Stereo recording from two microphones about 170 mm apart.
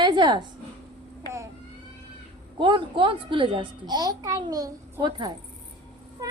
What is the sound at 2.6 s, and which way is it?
A child's voice, 30° right (ahead or behind).